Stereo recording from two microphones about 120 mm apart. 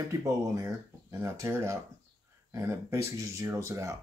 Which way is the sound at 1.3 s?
25° right (ahead or behind).